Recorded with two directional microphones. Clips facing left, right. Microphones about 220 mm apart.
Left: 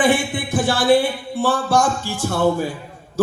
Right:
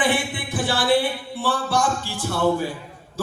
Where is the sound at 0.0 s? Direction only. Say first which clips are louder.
Left 5 dB; 45° left (ahead or behind).